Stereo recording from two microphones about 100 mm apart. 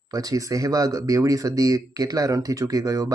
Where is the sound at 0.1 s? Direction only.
35° right (ahead or behind).